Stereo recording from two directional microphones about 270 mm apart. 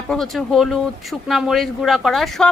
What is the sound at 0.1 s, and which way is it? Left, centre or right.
A woman's voice, centre.